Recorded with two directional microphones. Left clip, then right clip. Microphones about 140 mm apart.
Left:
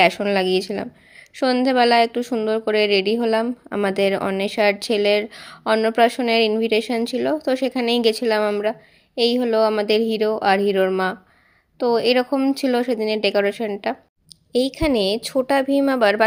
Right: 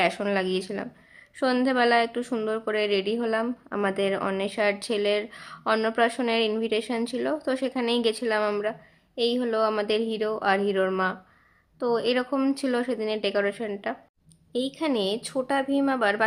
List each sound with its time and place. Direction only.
0.0 s a woman's voice: 35° left (ahead or behind)